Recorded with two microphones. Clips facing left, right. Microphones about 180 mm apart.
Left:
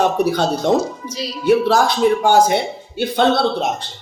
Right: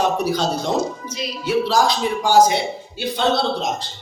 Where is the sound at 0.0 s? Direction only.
60° left (ahead or behind).